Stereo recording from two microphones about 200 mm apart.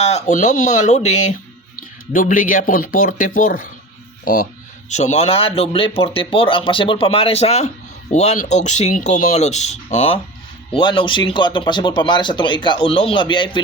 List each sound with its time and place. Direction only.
0.0 s speech: 35° left (ahead or behind)
4.9 s speech: 35° left (ahead or behind)